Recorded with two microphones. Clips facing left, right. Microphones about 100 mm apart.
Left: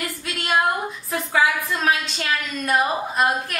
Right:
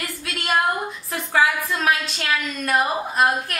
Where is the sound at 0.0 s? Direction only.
Centre (ahead or behind).